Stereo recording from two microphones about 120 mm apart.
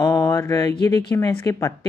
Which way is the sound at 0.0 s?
30° left (ahead or behind).